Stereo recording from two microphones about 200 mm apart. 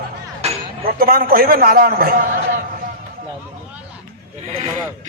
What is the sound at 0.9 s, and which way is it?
A man's voice, 50° right (ahead or behind).